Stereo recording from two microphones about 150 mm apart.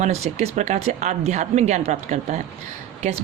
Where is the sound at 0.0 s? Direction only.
50° right (ahead or behind).